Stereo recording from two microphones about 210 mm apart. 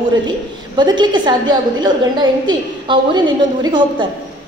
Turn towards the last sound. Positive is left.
turn(degrees=-20)  # may be behind; listen again after turning